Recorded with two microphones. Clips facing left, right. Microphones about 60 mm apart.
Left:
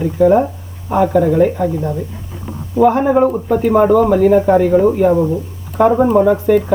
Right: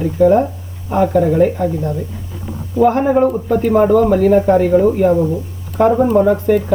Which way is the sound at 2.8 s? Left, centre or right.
Centre.